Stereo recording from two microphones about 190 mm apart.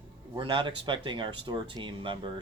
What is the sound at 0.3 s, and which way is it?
Speech, 25° right (ahead or behind).